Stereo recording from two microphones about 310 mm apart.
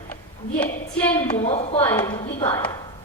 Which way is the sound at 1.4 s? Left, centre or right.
Centre.